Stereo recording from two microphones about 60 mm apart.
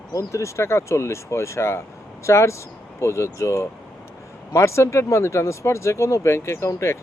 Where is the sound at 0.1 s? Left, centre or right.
Left.